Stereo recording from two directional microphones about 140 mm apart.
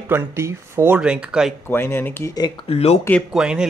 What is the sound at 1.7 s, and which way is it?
Speech, 15° left (ahead or behind).